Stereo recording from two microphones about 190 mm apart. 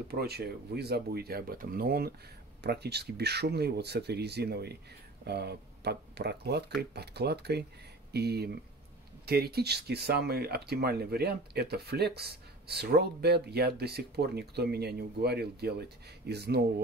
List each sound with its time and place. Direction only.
0.1 s speech: 55° right (ahead or behind)